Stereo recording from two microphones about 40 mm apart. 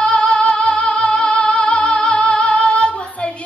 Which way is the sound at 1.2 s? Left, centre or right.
Left.